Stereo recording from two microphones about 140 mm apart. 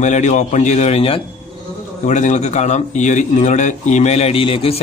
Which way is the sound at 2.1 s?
55° left (ahead or behind).